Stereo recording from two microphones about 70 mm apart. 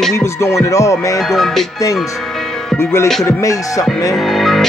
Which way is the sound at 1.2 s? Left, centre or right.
Centre.